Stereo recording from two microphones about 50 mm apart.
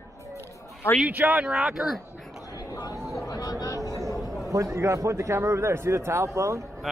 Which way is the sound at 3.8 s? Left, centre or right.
Right.